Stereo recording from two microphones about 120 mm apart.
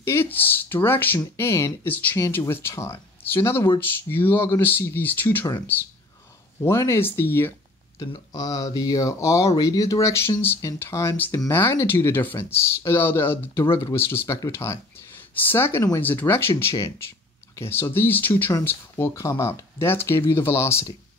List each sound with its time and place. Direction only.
0.0 s speech: 20° left (ahead or behind)
8.0 s speech: 35° left (ahead or behind)